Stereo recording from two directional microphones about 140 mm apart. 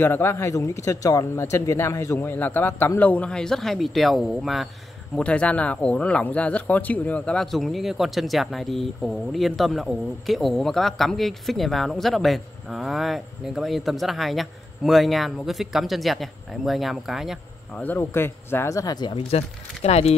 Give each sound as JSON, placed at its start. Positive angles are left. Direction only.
{"t": 0.0, "sound": "a man's voice", "side_deg": 15}
{"t": 17.8, "sound": "speech", "side_deg": 15}
{"t": 19.1, "sound": "speech", "side_deg": 50}